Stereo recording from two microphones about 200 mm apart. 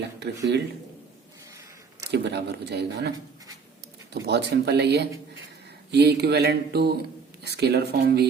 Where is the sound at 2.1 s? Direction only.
60° right (ahead or behind).